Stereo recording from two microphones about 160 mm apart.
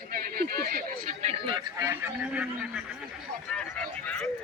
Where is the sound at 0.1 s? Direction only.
70° right (ahead or behind).